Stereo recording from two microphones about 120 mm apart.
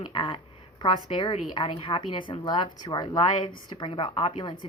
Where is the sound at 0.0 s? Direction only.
40° left (ahead or behind).